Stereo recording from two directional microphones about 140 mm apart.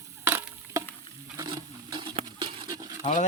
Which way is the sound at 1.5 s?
35° right (ahead or behind).